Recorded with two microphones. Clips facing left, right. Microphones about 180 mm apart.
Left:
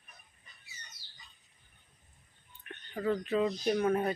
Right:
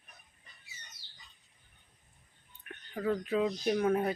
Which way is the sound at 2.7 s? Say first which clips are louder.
Even; 5° right (ahead or behind).